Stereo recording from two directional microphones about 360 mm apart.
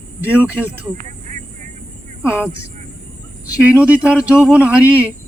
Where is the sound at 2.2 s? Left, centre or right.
Centre.